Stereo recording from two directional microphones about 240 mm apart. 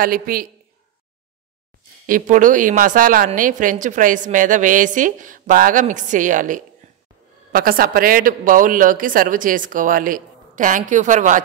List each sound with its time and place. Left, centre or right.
0.0 s a woman's voice: right
2.0 s a woman's voice: right